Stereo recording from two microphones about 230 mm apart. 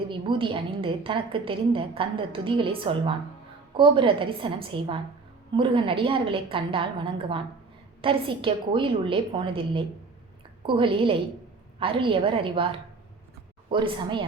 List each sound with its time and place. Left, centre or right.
0.1 s a woman's voice: right
13.7 s a woman's voice: right